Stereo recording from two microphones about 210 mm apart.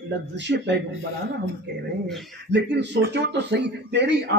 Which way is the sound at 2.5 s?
55° right (ahead or behind).